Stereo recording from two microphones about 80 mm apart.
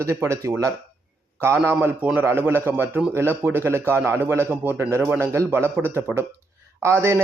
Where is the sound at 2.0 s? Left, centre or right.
Centre.